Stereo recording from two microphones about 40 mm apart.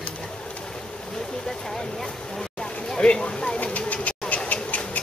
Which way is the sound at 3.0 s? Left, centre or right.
Left.